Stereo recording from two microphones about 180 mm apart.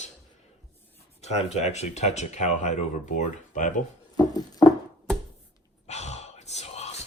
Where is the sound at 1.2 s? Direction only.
35° left (ahead or behind).